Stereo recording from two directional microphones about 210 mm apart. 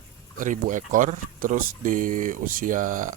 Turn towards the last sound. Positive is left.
turn(degrees=-40)  # may be behind; listen again after turning